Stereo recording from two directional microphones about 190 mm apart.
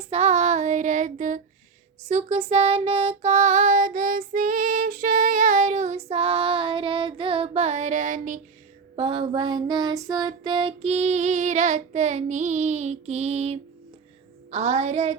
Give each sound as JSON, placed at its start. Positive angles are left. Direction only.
{"t": 0.1, "sound": "child singing", "side_deg": -35}
{"t": 9.0, "sound": "child singing", "side_deg": -25}